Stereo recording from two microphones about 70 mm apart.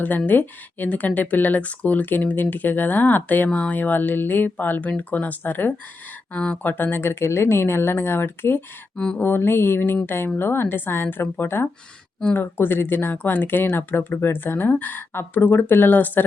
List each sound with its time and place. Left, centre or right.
0.3 s a woman's voice: left